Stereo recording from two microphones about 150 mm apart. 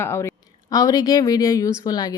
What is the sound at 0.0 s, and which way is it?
A woman's voice, 15° left (ahead or behind).